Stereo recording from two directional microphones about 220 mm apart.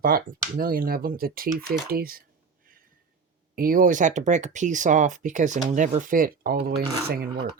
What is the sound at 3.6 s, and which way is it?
Speech, 40° right (ahead or behind).